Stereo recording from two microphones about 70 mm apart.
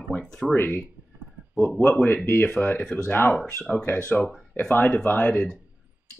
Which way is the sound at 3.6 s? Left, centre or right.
Centre.